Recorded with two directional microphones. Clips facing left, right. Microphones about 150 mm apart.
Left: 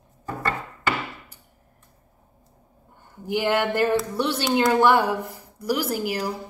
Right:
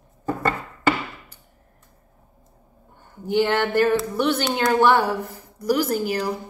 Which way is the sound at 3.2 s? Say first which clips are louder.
Right 2 dB; 10° left (ahead or behind).